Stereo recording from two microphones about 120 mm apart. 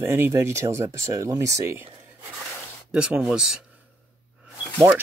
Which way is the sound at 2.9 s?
10° right (ahead or behind).